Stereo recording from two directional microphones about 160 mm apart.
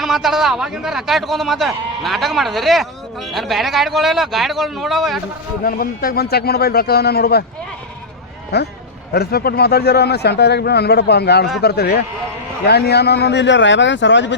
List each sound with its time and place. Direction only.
0.0 s a man's voice: centre (ahead or behind)
5.6 s a man's voice: 65° left (ahead or behind)
8.5 s a man's voice: 90° left
9.1 s a man's voice: 75° left (ahead or behind); by 14.3 s 90° left